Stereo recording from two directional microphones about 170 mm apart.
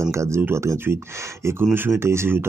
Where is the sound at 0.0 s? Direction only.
15° right (ahead or behind).